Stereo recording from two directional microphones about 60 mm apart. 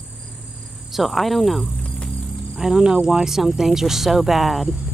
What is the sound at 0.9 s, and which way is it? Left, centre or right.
Speech, centre.